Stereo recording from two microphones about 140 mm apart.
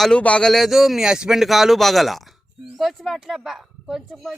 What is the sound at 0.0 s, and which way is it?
A woman's voice, 5° left (ahead or behind).